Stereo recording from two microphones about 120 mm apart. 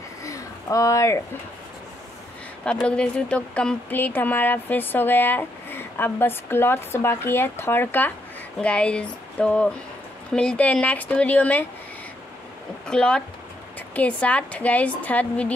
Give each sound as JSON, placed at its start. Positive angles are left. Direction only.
{"t": 0.2, "sound": "a sound", "side_deg": 25}
{"t": 2.6, "sound": "speech", "side_deg": 10}
{"t": 12.8, "sound": "speech", "side_deg": 10}